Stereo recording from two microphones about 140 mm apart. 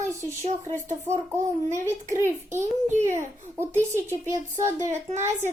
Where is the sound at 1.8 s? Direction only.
20° right (ahead or behind).